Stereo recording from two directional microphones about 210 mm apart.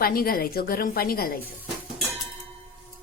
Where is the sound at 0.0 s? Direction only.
45° left (ahead or behind).